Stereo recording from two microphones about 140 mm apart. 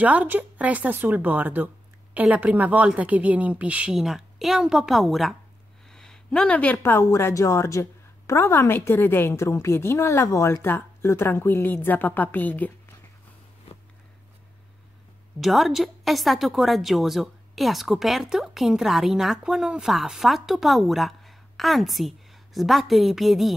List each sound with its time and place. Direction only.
0.0 s a woman's voice: 10° right (ahead or behind); by 12.9 s 10° left (ahead or behind)
15.4 s a woman's voice: centre (ahead or behind)